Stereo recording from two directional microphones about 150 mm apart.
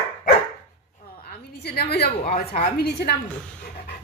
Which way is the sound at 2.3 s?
55° left (ahead or behind).